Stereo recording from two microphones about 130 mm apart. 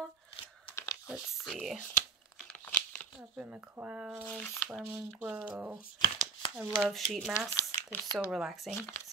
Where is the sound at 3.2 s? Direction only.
10° right (ahead or behind).